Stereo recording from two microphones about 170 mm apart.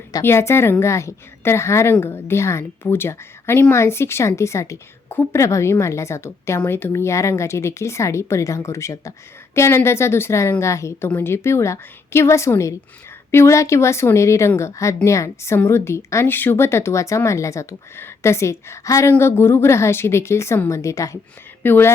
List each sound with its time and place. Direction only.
0.1 s a woman's voice: 15° left (ahead or behind)